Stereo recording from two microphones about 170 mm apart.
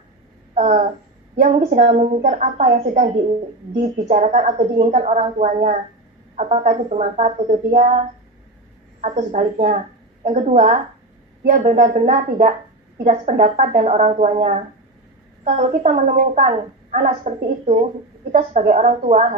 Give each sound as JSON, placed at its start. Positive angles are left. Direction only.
{"t": 0.6, "sound": "a woman's voice", "side_deg": -45}
{"t": 9.0, "sound": "a woman's voice", "side_deg": -45}